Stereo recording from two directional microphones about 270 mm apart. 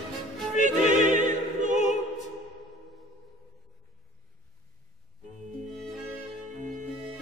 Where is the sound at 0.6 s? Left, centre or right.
Right.